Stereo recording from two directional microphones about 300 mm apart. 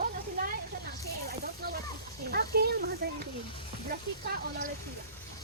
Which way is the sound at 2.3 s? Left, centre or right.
Right.